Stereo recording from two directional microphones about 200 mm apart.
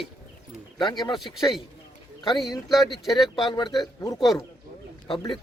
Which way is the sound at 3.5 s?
20° left (ahead or behind).